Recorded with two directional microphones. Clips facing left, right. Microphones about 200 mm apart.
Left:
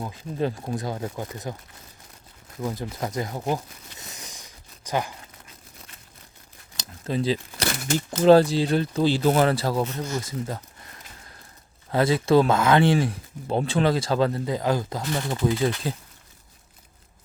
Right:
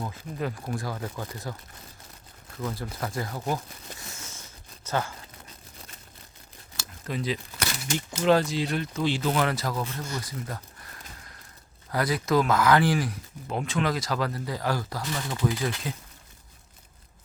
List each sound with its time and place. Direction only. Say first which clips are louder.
0.3 s speech: left 5 dB; 25° left (ahead or behind)
2.6 s crumpling: left 3 dB; 20° left (ahead or behind)
6.7 s a sound: left 6 dB; 30° left (ahead or behind)
8.2 s speech: left 7 dB; 35° left (ahead or behind)
9.8 s speech: left 5 dB; 20° left (ahead or behind)
11.9 s speech: left 6 dB; 25° left (ahead or behind)